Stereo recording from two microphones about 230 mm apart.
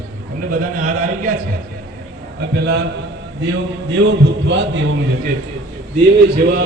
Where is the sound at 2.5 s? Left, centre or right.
Right.